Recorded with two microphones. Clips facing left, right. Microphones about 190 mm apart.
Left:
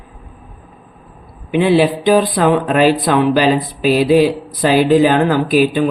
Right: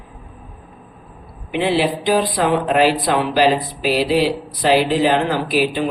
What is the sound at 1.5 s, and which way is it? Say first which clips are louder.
Speech: left 6 dB; 50° left (ahead or behind).